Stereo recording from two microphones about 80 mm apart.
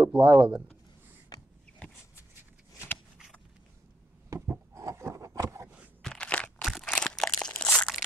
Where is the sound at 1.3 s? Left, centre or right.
Left.